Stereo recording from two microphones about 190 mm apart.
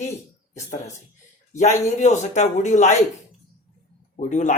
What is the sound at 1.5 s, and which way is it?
A man's voice, 40° left (ahead or behind).